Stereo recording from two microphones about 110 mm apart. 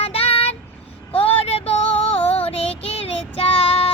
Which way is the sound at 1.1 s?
60° left (ahead or behind).